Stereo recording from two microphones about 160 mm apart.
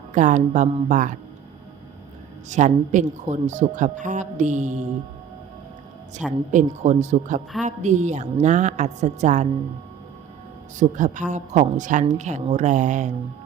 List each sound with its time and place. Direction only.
0.1 s a woman's voice: 50° right (ahead or behind)
2.5 s a woman's voice: 50° right (ahead or behind)
6.5 s a woman's voice: 50° right (ahead or behind)
10.8 s a woman's voice: 50° right (ahead or behind)